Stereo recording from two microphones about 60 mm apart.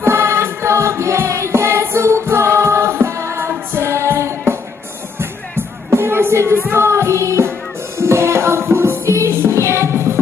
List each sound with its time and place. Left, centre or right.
0.0 s music: right